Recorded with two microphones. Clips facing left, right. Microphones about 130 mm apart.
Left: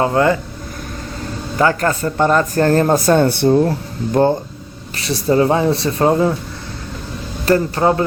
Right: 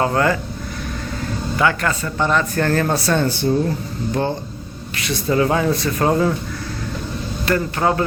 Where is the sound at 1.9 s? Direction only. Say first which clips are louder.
Left 4 dB; 50° left (ahead or behind); by 6.3 s 20° left (ahead or behind).